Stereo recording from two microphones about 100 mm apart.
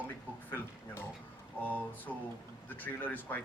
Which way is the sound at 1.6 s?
15° left (ahead or behind).